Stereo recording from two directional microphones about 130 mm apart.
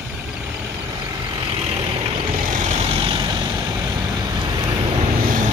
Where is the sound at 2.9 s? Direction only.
40° right (ahead or behind).